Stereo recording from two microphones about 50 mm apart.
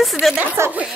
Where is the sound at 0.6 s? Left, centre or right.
Right.